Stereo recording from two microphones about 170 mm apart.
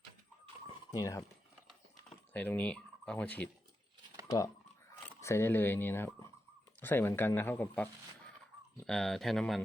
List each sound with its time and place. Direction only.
0.9 s speech: 20° left (ahead or behind)
2.0 s speech: 10° left (ahead or behind)
4.3 s speech: 20° left (ahead or behind); by 9.6 s centre (ahead or behind)